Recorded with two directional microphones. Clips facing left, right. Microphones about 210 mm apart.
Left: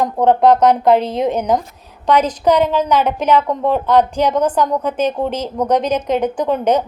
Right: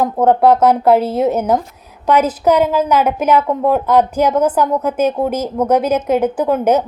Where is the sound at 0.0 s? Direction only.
5° right (ahead or behind).